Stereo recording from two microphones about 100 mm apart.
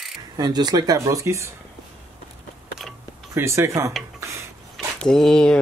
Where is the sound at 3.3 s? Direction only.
25° right (ahead or behind).